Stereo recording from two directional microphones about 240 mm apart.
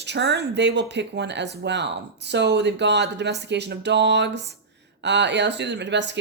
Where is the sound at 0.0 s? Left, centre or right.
Right.